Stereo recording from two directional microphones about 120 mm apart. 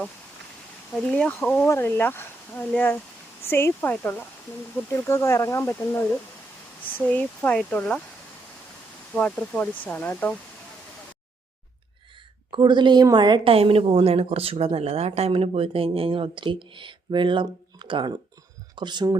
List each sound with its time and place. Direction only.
0.9 s speech: 5° left (ahead or behind)
9.1 s speech: 10° left (ahead or behind)
12.5 s a woman's voice: 40° right (ahead or behind)